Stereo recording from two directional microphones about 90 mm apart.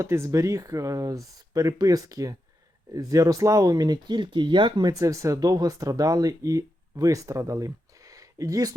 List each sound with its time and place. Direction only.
0.0 s speech: 35° right (ahead or behind); by 4.9 s 65° right (ahead or behind)
4.9 s speech: 40° right (ahead or behind)